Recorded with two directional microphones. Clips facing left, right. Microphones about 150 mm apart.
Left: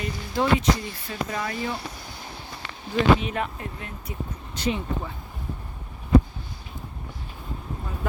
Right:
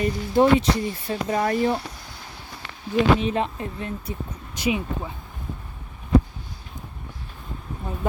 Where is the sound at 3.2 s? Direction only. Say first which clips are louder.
Right 5 dB; 25° right (ahead or behind).